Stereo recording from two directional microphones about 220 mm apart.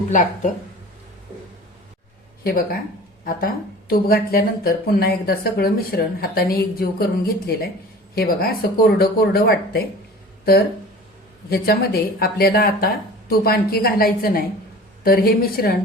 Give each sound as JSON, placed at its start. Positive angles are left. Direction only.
{"t": 0.1, "sound": "speech", "side_deg": 35}
{"t": 2.4, "sound": "speech", "side_deg": 45}
{"t": 8.1, "sound": "speech", "side_deg": 45}
{"t": 11.4, "sound": "speech", "side_deg": 45}